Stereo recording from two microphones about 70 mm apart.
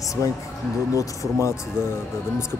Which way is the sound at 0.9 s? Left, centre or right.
Left.